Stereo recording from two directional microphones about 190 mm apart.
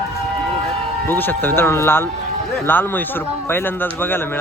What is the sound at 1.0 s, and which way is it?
A man's voice, 10° left (ahead or behind).